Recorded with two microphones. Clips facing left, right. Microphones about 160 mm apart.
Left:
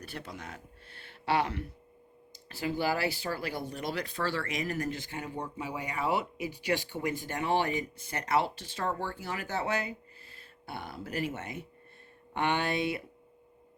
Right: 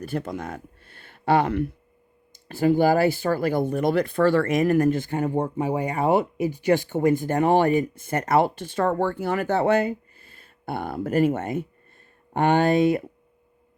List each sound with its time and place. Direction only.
0.0 s speech: 45° right (ahead or behind)